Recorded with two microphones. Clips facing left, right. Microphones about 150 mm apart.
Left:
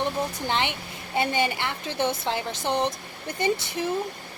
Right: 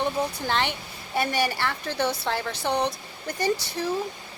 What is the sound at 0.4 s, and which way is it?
A woman's voice, 15° left (ahead or behind).